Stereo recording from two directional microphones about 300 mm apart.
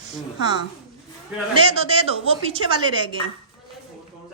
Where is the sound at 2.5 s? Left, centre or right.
Centre.